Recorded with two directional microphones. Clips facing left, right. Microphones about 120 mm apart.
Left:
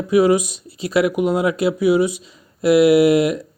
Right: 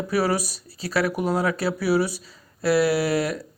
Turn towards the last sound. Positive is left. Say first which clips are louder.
# left 9 dB
turn(degrees=20)  # may be behind; listen again after turning